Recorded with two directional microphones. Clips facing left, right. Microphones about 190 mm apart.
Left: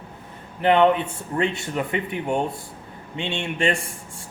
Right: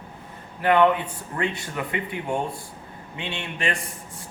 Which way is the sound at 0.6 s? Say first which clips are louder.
Left 2 dB; 25° left (ahead or behind).